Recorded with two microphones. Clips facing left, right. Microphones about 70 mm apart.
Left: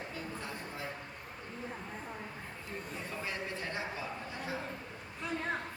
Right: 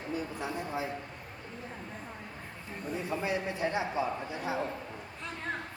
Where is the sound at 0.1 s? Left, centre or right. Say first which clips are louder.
Right 6 dB; centre.